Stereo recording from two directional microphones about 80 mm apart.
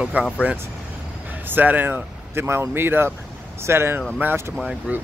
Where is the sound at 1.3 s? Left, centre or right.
Right.